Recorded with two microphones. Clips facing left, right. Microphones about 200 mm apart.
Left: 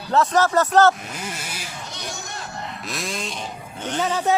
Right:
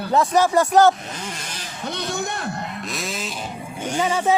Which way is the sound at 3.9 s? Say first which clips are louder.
Right 1 dB; 10° right (ahead or behind).